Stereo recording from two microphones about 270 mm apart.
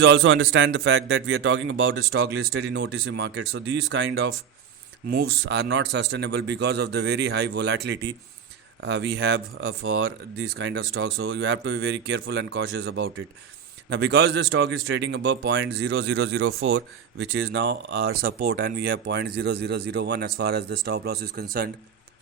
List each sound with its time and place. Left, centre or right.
0.0 s a man's voice: right
8.8 s a man's voice: right